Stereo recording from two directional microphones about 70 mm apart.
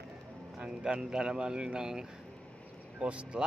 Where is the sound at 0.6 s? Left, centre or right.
Centre.